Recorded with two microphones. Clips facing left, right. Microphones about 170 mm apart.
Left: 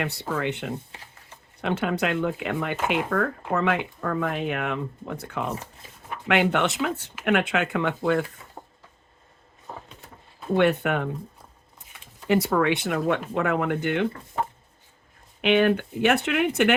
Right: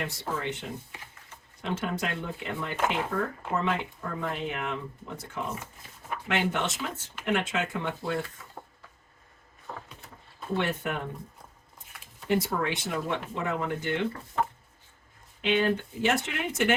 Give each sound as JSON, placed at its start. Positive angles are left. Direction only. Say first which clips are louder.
{"t": 0.0, "sound": "speech", "louder": "left 5 dB", "side_deg": 70}
{"t": 8.4, "sound": "a sound", "louder": "left 1 dB", "side_deg": 20}
{"t": 9.7, "sound": "a sound", "louder": "left 1 dB", "side_deg": 20}
{"t": 10.6, "sound": "speech", "louder": "left 10 dB", "side_deg": 70}
{"t": 12.3, "sound": "speech", "louder": "left 6 dB", "side_deg": 75}
{"t": 15.4, "sound": "speech", "louder": "left 6 dB", "side_deg": 70}